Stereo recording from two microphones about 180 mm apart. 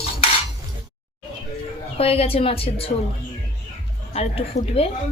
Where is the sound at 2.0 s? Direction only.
35° left (ahead or behind).